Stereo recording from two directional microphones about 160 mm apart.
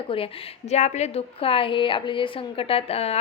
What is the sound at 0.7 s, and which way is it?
A woman's voice, 45° left (ahead or behind).